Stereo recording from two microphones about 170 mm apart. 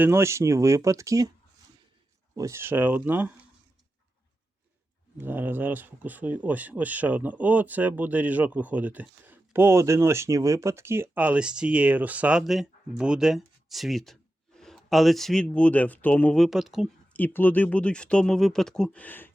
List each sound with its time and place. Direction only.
0.0 s speech: 15° right (ahead or behind)
2.3 s speech: 15° right (ahead or behind)
5.2 s speech: 10° right (ahead or behind)
17.2 s speech: 10° left (ahead or behind)